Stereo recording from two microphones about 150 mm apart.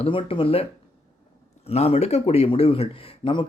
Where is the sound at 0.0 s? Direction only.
35° left (ahead or behind).